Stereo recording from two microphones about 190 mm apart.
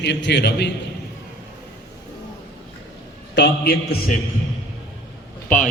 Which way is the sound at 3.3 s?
60° left (ahead or behind).